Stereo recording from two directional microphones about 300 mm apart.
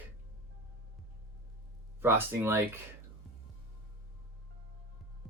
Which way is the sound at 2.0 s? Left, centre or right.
Centre.